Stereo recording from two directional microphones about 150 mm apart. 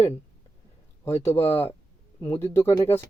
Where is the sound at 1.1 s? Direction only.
20° left (ahead or behind).